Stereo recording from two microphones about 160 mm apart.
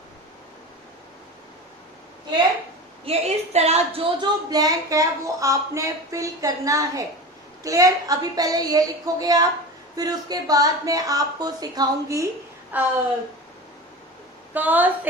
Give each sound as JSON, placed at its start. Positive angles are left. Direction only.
{"t": 3.1, "sound": "a woman's voice", "side_deg": -40}
{"t": 14.5, "sound": "a woman's voice", "side_deg": -10}